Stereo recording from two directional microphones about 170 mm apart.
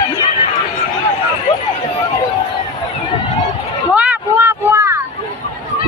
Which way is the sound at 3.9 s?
10° right (ahead or behind).